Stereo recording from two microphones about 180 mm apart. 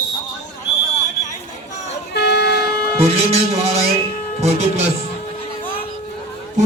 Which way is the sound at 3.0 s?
35° right (ahead or behind).